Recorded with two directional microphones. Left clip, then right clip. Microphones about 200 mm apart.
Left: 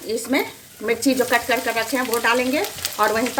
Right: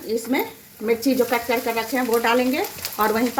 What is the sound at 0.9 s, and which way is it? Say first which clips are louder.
Speech: left 1 dB; 10° right (ahead or behind).